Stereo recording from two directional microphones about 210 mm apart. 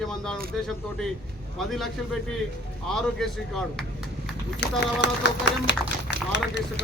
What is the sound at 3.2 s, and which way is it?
Speech, centre (ahead or behind).